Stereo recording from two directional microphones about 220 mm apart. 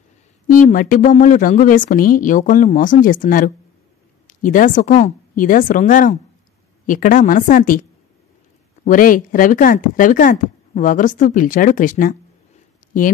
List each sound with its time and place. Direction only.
0.5 s speech: 40° left (ahead or behind)
8.8 s speech: 40° left (ahead or behind)
12.8 s a sound: 35° left (ahead or behind)